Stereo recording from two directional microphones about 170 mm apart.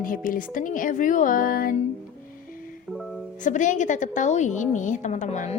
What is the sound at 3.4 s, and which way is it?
A woman's voice, 45° left (ahead or behind).